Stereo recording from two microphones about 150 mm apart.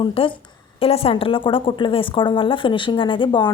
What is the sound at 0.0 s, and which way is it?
A woman's voice, 35° left (ahead or behind).